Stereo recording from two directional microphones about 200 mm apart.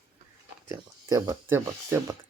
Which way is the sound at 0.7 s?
15° right (ahead or behind).